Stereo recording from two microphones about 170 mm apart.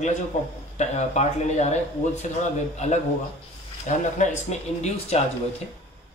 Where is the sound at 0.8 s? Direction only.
40° left (ahead or behind).